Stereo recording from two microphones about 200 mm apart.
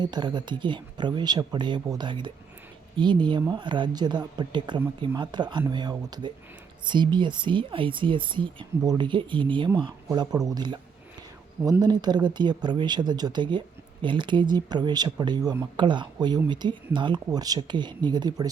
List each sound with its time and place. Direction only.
0.0 s speech: 20° right (ahead or behind)